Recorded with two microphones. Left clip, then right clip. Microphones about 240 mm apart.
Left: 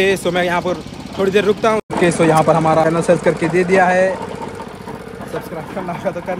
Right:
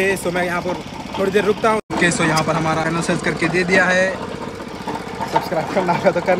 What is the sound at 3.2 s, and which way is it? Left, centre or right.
Speech, left.